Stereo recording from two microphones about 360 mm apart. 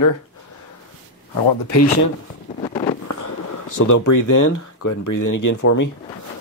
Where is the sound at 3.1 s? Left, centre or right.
Left.